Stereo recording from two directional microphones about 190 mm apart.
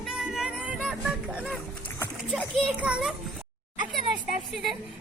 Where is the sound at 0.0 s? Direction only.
5° right (ahead or behind).